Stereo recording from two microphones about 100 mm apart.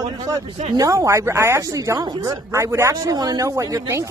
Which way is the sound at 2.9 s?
40° right (ahead or behind).